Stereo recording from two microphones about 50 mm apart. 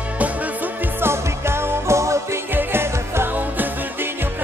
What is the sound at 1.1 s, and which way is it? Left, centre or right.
Music, right.